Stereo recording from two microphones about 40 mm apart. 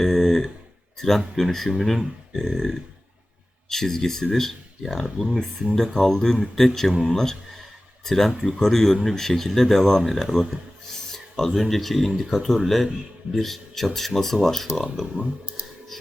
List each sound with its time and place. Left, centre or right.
0.0 s a sound: centre
0.9 s a man's voice: centre
11.1 s music: centre
11.7 s speech: centre
15.2 s speech: right